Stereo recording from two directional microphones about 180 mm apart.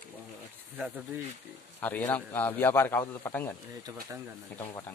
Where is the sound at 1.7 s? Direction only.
10° left (ahead or behind).